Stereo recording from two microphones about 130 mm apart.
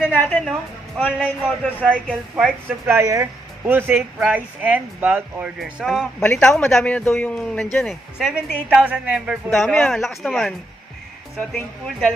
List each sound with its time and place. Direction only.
0.0 s a woman's voice: 15° left (ahead or behind)
0.4 s a man's voice: centre (ahead or behind)
2.9 s speech: 20° right (ahead or behind)
5.6 s a man's voice: 5° right (ahead or behind)
7.8 s a man's voice: centre (ahead or behind)